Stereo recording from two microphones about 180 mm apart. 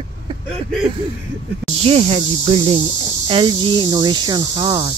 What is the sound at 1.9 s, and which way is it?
Speech, 35° right (ahead or behind).